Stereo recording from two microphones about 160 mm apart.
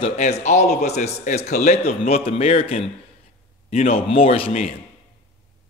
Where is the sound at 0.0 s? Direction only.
45° left (ahead or behind).